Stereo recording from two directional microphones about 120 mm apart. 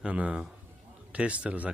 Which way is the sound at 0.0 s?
10° right (ahead or behind).